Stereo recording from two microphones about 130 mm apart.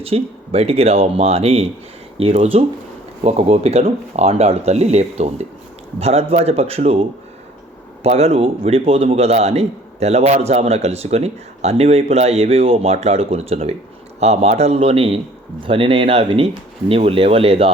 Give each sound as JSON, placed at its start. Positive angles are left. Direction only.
{"t": 0.0, "sound": "a man's voice", "side_deg": -50}
{"t": 8.0, "sound": "a man's voice", "side_deg": -55}